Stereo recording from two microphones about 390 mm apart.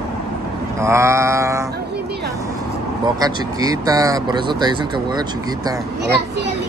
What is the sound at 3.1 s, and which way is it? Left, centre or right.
Speech, centre.